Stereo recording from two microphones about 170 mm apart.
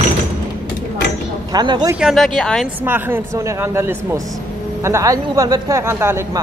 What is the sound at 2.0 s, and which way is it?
Speech, centre (ahead or behind).